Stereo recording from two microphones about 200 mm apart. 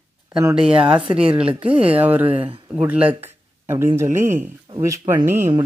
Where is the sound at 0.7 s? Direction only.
25° right (ahead or behind).